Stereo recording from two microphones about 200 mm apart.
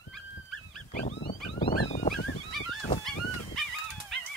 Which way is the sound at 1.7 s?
40° left (ahead or behind).